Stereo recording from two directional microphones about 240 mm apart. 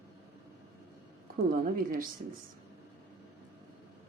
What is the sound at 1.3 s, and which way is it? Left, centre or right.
Speech, right.